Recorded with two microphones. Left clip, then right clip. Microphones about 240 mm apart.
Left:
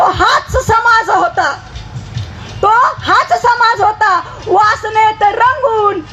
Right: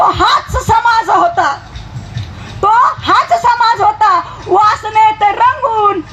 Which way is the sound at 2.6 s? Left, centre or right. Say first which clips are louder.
Even; right.